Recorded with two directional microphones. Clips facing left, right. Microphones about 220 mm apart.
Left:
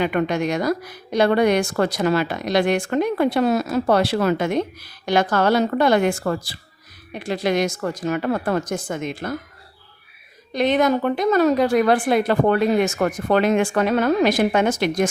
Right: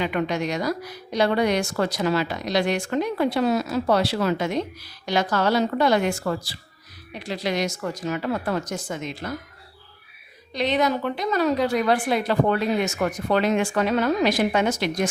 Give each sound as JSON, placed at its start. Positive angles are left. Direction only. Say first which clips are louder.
{"t": 0.0, "sound": "a woman's voice", "louder": "left 4 dB", "side_deg": 50}
{"t": 10.5, "sound": "a woman's voice", "louder": "left 4 dB", "side_deg": 50}